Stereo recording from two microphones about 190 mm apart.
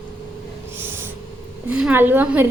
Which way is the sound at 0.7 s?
10° right (ahead or behind).